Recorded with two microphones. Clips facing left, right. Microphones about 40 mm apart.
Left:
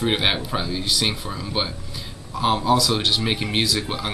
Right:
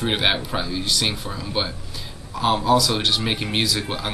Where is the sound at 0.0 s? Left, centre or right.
Centre.